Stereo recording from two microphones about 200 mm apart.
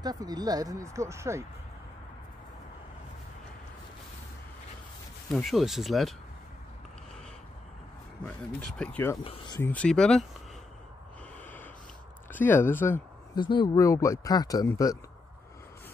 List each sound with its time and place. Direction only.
0.0 s speech: 20° right (ahead or behind)
5.3 s speech: centre (ahead or behind)
8.3 s speech: 5° left (ahead or behind)
9.2 s speech: 30° left (ahead or behind)
9.6 s speech: 10° left (ahead or behind)
11.3 s snort: 10° left (ahead or behind)
12.3 s speech: 10° left (ahead or behind)
13.4 s speech: 25° left (ahead or behind)